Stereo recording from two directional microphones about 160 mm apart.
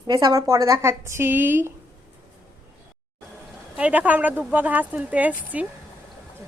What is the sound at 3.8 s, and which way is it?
A woman's voice, 10° right (ahead or behind).